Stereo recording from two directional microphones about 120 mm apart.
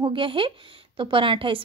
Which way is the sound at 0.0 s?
45° right (ahead or behind).